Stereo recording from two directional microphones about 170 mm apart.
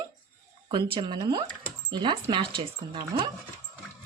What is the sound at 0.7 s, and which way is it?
Speech, 25° right (ahead or behind).